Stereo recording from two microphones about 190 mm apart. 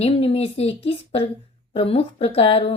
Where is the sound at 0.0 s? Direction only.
30° left (ahead or behind).